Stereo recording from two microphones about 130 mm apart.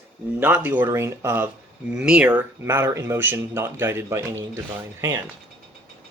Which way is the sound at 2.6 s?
20° right (ahead or behind).